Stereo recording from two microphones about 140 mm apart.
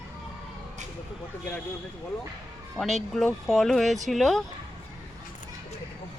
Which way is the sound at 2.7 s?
Centre (ahead or behind).